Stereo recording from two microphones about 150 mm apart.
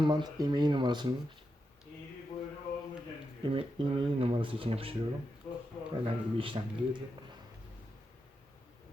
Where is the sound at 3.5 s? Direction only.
35° right (ahead or behind).